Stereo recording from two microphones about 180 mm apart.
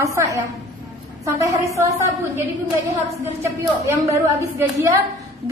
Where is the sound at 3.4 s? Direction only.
15° right (ahead or behind).